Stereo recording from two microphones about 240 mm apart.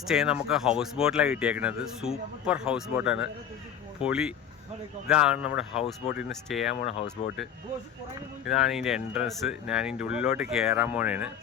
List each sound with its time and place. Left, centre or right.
0.1 s speech: centre
7.2 s speech: left
8.4 s speech: centre